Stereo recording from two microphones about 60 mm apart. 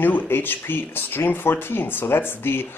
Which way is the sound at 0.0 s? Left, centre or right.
Left.